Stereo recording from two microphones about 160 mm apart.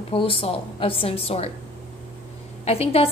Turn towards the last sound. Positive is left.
turn(degrees=40)  # may be behind; listen again after turning